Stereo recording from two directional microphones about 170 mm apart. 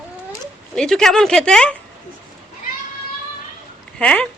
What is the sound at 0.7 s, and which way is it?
Speech, 5° left (ahead or behind).